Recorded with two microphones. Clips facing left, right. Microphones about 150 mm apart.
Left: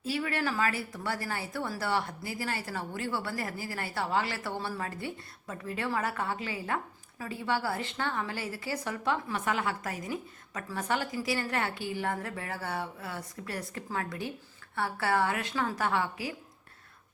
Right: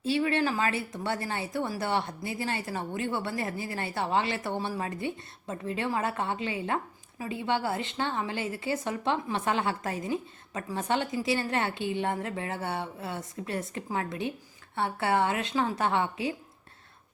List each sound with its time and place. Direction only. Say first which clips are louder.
0.0 s a woman's voice: right 5 dB; 25° right (ahead or behind)